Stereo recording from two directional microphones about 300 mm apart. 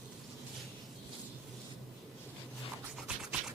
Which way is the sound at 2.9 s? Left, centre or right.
Centre.